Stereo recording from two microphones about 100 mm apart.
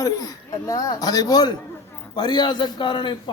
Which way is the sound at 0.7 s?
35° left (ahead or behind).